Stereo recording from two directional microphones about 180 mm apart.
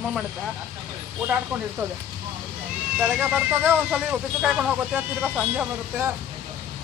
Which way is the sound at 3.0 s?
5° right (ahead or behind).